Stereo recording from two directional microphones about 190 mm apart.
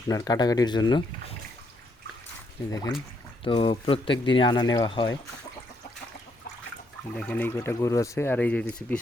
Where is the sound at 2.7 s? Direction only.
20° left (ahead or behind).